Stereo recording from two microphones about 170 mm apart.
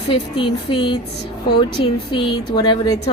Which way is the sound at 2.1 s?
25° left (ahead or behind).